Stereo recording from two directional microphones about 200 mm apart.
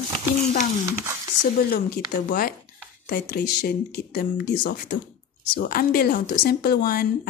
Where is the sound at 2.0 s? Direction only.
45° left (ahead or behind).